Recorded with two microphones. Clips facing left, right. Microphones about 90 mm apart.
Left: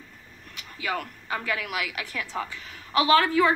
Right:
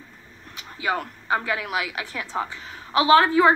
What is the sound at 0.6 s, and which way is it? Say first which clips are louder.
A woman's voice: right 4 dB; 30° right (ahead or behind).